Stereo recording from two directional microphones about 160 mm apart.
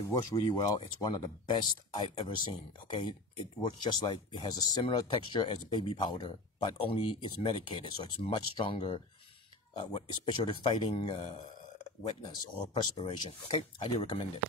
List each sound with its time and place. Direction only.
0.1 s speech: 25° left (ahead or behind)